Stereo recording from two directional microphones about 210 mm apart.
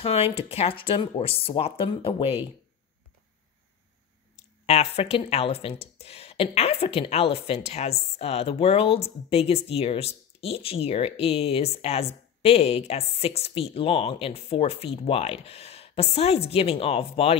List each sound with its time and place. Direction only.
0.0 s speech: 30° left (ahead or behind)
4.6 s speech: 30° left (ahead or behind)